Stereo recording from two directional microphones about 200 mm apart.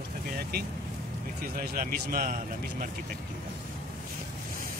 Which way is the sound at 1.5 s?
45° right (ahead or behind).